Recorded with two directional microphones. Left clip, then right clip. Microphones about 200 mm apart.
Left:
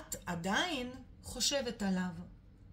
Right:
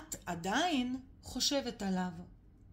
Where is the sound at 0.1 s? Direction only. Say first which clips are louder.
Even; 30° right (ahead or behind).